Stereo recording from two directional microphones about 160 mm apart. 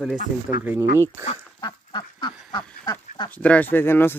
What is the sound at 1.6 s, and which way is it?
Duck, 30° left (ahead or behind).